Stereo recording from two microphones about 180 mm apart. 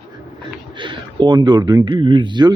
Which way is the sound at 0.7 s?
25° right (ahead or behind).